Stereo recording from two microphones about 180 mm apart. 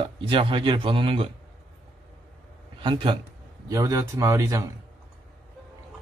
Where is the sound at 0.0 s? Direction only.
30° right (ahead or behind).